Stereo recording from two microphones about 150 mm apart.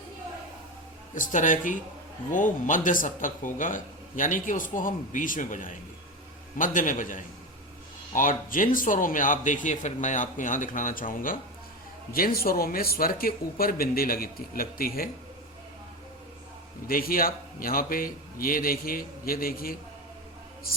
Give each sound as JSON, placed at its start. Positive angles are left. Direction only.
{"t": 1.1, "sound": "a man's voice", "side_deg": 60}
{"t": 12.1, "sound": "speech", "side_deg": 80}
{"t": 16.8, "sound": "speech", "side_deg": 75}